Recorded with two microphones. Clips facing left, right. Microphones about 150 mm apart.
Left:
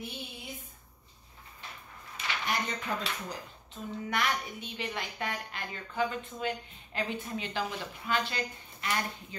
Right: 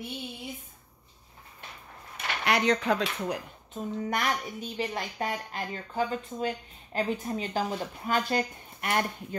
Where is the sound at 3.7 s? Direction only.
45° right (ahead or behind).